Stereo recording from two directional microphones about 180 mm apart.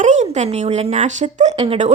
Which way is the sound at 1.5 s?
25° right (ahead or behind).